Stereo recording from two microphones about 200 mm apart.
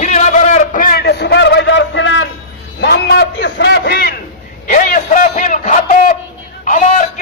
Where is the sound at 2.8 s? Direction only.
55° left (ahead or behind).